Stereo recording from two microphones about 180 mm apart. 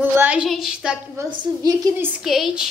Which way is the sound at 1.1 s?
20° right (ahead or behind).